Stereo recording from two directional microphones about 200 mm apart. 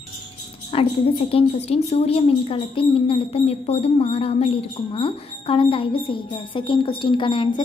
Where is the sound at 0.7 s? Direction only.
30° left (ahead or behind).